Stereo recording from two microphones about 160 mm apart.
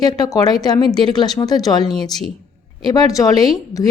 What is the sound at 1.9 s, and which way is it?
Speech, centre (ahead or behind).